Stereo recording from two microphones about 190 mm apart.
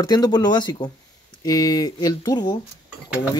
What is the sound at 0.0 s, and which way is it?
Speech, 20° left (ahead or behind).